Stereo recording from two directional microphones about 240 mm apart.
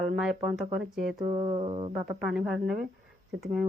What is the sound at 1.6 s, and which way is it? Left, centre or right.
Speech, right.